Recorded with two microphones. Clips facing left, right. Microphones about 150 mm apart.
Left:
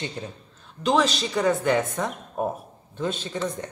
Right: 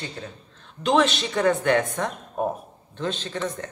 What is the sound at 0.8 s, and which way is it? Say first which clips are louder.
A woman's voice: right 1 dB; centre (ahead or behind).